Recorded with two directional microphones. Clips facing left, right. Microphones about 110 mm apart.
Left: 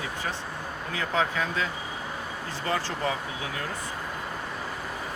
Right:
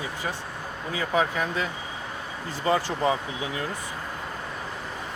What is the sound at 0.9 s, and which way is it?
Speech, 10° right (ahead or behind).